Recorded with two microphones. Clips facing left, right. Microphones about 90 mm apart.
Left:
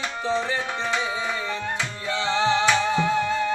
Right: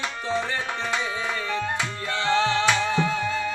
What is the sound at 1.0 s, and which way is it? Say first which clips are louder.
Music: left 1 dB; 15° left (ahead or behind).